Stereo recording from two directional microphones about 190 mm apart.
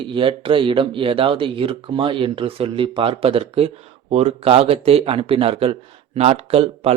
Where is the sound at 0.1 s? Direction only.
25° right (ahead or behind).